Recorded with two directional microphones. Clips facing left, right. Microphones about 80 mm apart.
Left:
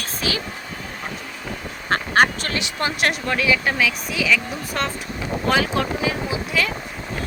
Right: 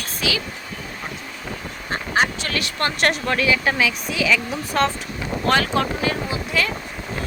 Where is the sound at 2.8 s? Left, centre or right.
Centre.